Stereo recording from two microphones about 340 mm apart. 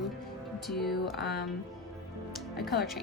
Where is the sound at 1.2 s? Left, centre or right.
Left.